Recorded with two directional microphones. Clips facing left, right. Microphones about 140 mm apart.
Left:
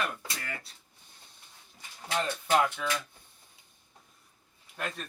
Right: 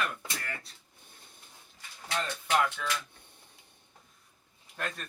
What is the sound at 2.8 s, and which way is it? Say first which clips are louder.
Speech: left 2 dB; 20° left (ahead or behind).